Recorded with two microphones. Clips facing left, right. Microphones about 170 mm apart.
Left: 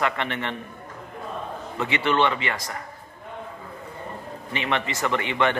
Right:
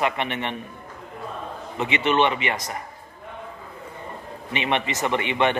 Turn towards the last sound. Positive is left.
turn(degrees=-20)  # may be behind; listen again after turning